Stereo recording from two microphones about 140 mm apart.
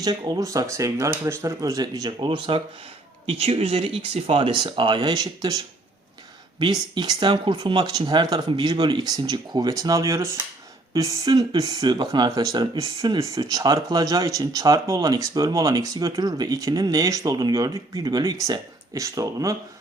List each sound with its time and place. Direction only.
0.0 s speech: 30° right (ahead or behind)
3.2 s speech: 45° right (ahead or behind); by 5.5 s 25° right (ahead or behind)
6.6 s speech: 30° right (ahead or behind)